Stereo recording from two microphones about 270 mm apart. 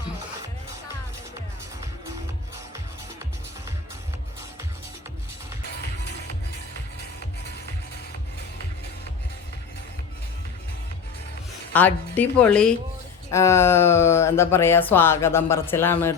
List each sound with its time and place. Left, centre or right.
5.6 s music: left
11.7 s a woman's voice: centre